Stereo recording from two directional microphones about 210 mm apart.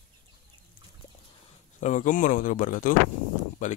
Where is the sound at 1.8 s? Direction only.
35° left (ahead or behind).